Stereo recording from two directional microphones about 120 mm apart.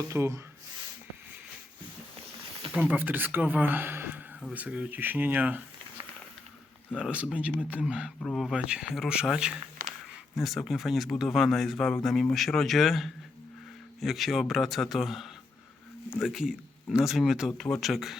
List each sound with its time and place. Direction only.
0.1 s speech: 25° right (ahead or behind)
2.7 s speech: 15° right (ahead or behind)
6.9 s speech: 5° right (ahead or behind)
8.2 s speech: 5° left (ahead or behind)
8.5 s speech: 10° right (ahead or behind)